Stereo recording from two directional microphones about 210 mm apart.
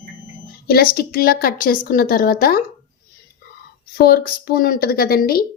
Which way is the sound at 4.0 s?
45° left (ahead or behind).